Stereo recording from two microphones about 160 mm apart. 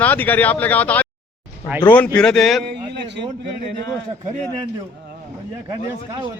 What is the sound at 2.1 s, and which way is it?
Speech, 5° left (ahead or behind).